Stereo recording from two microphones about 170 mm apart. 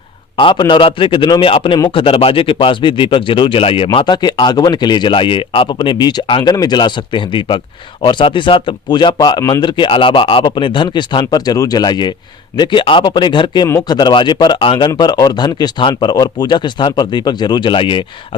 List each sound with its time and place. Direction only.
0.3 s a man's voice: 30° left (ahead or behind)